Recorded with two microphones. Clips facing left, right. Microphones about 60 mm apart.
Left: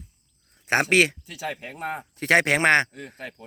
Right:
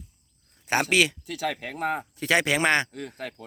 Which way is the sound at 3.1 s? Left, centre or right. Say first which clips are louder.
Right 2 dB; right.